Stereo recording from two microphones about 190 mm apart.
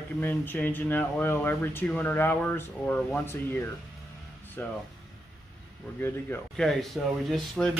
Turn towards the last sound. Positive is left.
turn(degrees=0)  # may be behind; listen again after turning